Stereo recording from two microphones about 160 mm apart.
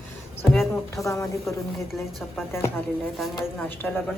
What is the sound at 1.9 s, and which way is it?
Speech, centre (ahead or behind).